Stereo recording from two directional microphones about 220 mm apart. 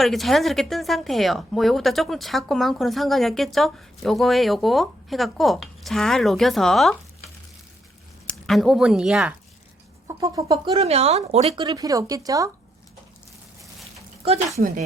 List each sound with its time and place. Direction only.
0.0 s a woman's voice: centre (ahead or behind)
8.3 s speech: centre (ahead or behind)
10.1 s speech: 15° right (ahead or behind)
10.8 s speech: 30° right (ahead or behind)